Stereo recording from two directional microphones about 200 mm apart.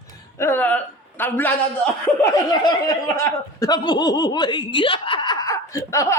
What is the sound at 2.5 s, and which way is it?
Speech, 20° left (ahead or behind).